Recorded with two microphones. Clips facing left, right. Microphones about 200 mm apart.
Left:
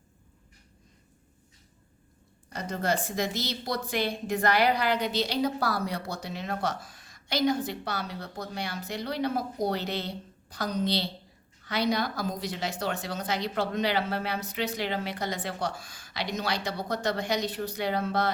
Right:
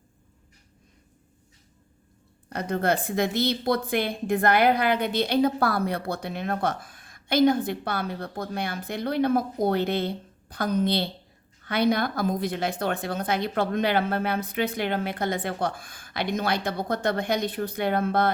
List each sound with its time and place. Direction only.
2.5 s a woman's voice: 60° right (ahead or behind)